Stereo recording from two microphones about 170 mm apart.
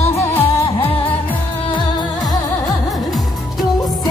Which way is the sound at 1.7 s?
25° left (ahead or behind).